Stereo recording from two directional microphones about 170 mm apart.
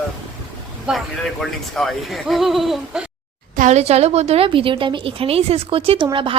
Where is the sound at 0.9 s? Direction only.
Centre (ahead or behind).